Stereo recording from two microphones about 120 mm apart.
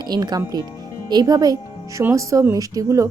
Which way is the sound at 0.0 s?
35° right (ahead or behind).